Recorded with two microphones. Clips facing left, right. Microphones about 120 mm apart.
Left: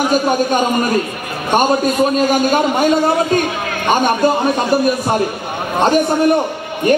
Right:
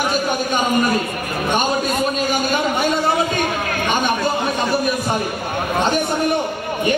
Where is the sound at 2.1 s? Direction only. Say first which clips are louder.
Left 6 dB; 45° left (ahead or behind).